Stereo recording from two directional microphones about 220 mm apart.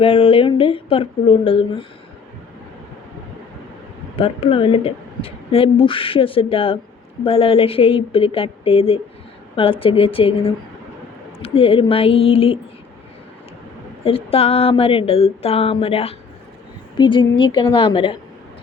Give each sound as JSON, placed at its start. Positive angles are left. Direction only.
{"t": 0.0, "sound": "a woman's voice", "side_deg": 25}
{"t": 4.2, "sound": "a woman's voice", "side_deg": 25}
{"t": 14.0, "sound": "a woman's voice", "side_deg": 25}